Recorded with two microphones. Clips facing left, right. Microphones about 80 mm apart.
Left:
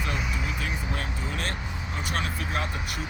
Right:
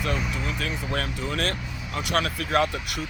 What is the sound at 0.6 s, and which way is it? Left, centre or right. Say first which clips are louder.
Speech: right 3 dB; right.